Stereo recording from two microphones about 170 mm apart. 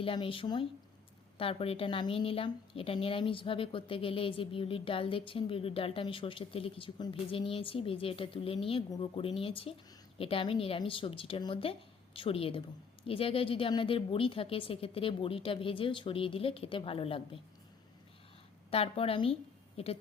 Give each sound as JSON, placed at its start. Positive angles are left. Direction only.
{"t": 0.0, "sound": "a woman's voice", "side_deg": 30}
{"t": 18.7, "sound": "a woman's voice", "side_deg": 35}